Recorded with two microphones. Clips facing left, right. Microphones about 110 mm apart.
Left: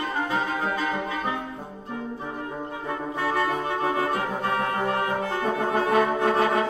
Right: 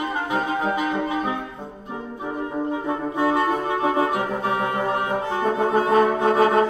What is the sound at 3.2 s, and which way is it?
Music, 20° right (ahead or behind).